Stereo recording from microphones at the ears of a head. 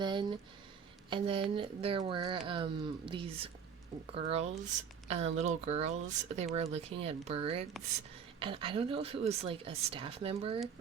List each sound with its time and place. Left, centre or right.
1.1 s speech: right